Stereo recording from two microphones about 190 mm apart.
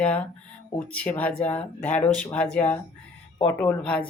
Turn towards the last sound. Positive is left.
turn(degrees=5)  # may be behind; listen again after turning